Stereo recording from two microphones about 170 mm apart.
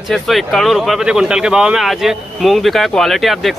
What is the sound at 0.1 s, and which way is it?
Speech, centre (ahead or behind).